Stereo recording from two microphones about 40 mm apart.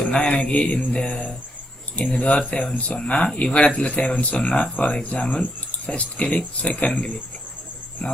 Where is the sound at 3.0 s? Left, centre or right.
Left.